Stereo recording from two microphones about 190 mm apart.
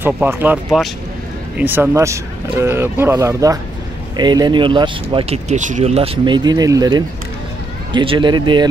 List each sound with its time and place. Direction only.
0.0 s speech: 10° right (ahead or behind)